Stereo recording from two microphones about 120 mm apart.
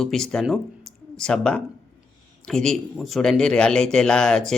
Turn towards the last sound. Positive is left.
turn(degrees=5)  # may be behind; listen again after turning